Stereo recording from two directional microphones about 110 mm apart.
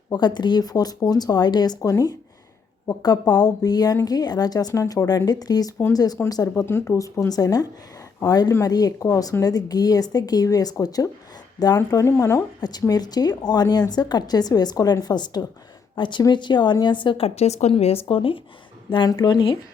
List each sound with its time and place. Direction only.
0.1 s speech: 40° left (ahead or behind)
6.7 s speech: 20° left (ahead or behind); by 17.2 s 45° left (ahead or behind)
17.2 s speech: 75° left (ahead or behind); by 19.5 s 45° left (ahead or behind)